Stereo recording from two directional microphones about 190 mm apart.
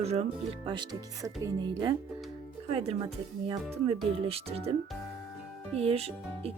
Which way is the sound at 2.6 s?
35° right (ahead or behind).